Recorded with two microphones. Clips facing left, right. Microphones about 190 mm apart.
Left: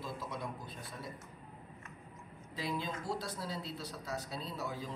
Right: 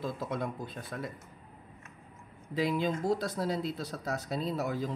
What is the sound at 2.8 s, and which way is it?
Speech, 45° right (ahead or behind).